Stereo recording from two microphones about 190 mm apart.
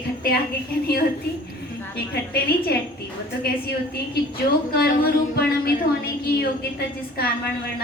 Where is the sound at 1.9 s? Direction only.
55° left (ahead or behind).